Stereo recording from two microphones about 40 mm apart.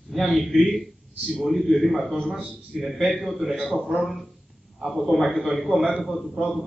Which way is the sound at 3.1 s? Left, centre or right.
Centre.